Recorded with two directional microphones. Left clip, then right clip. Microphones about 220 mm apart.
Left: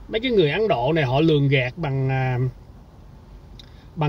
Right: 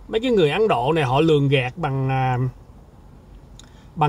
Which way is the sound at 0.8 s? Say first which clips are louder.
Right 1 dB; 15° right (ahead or behind).